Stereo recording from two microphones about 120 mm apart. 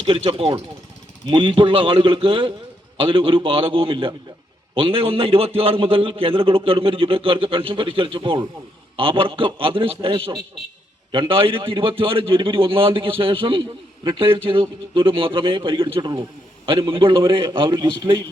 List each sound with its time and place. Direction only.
0.0 s a man's voice: 50° right (ahead or behind)